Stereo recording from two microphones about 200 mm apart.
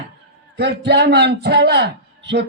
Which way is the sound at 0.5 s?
55° right (ahead or behind).